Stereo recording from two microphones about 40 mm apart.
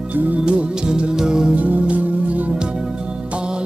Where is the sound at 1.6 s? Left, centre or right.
Right.